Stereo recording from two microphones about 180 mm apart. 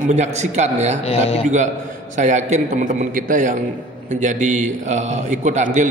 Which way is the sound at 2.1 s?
40° right (ahead or behind).